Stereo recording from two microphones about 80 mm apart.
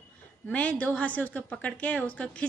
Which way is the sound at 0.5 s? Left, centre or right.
Centre.